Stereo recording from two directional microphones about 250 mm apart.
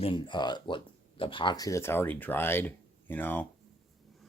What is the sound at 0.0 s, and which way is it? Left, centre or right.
Speech, centre.